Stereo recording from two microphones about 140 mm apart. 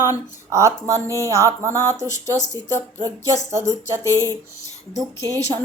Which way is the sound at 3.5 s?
20° right (ahead or behind).